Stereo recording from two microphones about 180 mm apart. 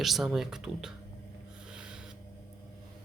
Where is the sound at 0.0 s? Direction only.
Centre (ahead or behind).